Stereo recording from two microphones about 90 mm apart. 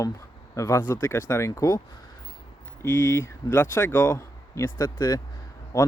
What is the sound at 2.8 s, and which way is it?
Speech, 25° left (ahead or behind).